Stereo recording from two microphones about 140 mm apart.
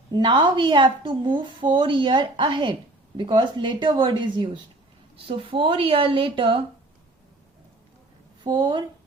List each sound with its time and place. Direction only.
0.1 s a woman's voice: 35° right (ahead or behind)
8.4 s a woman's voice: 35° right (ahead or behind)